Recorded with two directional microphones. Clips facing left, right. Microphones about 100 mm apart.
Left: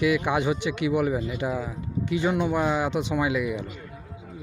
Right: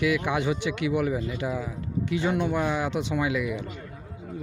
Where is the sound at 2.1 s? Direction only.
15° left (ahead or behind).